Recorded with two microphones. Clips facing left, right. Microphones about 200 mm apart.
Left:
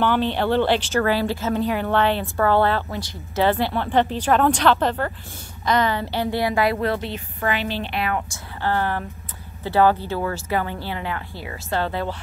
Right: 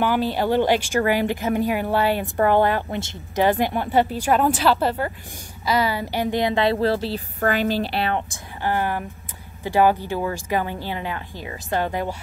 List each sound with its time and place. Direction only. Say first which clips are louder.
0.0 s a woman's voice: even; 10° right (ahead or behind); by 8.2 s 30° right (ahead or behind)
8.6 s a woman's voice: even; 15° right (ahead or behind)